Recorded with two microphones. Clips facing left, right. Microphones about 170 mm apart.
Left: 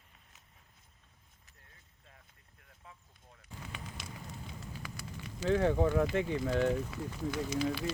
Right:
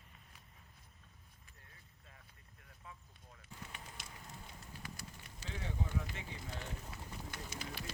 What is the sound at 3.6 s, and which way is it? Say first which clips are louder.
Speech: left 6 dB; 90° left.